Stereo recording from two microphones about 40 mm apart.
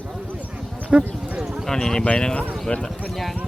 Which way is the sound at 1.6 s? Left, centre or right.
Centre.